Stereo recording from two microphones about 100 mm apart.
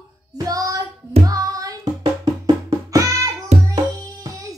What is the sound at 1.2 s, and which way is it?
Music, 35° right (ahead or behind).